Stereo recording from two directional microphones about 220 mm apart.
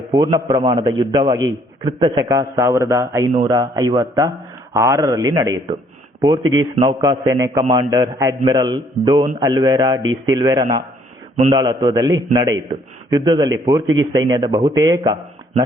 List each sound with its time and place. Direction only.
0.1 s a man's voice: 20° right (ahead or behind)
6.7 s a man's voice: 20° right (ahead or behind)